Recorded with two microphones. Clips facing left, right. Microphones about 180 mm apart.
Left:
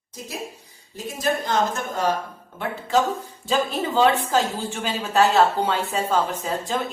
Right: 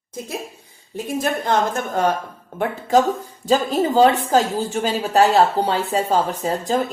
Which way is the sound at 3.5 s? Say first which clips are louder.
Right 5 dB; 40° right (ahead or behind).